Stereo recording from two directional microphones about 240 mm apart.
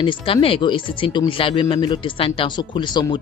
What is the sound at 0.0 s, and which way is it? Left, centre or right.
Speech, centre.